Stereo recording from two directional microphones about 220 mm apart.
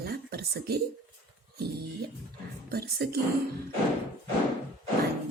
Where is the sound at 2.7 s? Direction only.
45° right (ahead or behind).